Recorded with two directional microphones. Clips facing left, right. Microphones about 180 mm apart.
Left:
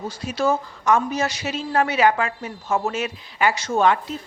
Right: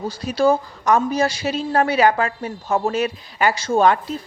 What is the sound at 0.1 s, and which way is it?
A woman's voice, 35° right (ahead or behind).